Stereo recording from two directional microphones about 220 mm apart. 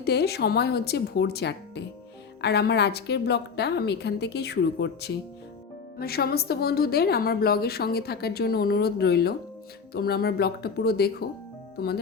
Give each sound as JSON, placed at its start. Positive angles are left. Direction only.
{"t": 0.0, "sound": "a woman's voice", "side_deg": 45}